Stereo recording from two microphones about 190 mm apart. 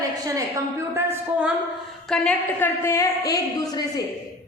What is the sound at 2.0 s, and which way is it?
A woman's voice, 5° left (ahead or behind).